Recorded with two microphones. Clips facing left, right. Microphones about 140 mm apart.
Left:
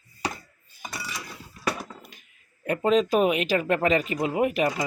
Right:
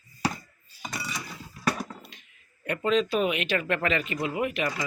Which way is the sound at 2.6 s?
35° left (ahead or behind).